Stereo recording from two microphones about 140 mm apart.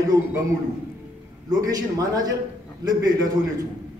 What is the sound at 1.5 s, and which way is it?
Speech, 25° right (ahead or behind).